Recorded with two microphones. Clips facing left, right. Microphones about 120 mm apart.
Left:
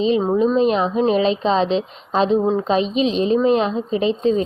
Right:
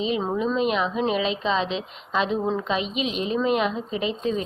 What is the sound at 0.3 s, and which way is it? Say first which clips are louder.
A woman's voice: left 5 dB; 30° left (ahead or behind).